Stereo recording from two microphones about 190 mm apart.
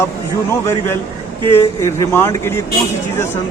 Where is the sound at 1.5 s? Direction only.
15° left (ahead or behind).